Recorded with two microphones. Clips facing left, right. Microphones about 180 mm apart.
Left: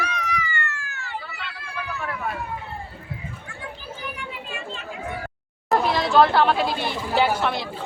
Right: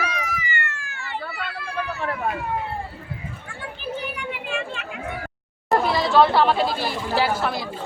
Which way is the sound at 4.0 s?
70° right (ahead or behind).